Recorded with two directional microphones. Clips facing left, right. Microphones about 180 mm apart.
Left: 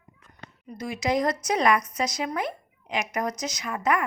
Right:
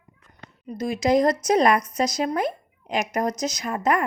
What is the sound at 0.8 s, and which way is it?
Speech, 35° right (ahead or behind).